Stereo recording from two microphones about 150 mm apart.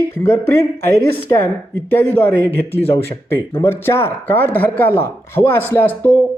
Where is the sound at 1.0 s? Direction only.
20° left (ahead or behind).